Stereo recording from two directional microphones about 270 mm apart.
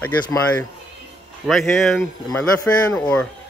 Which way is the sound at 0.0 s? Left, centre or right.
Centre.